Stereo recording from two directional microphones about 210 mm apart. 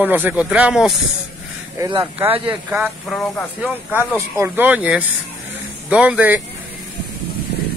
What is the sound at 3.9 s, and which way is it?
Speech, 10° left (ahead or behind).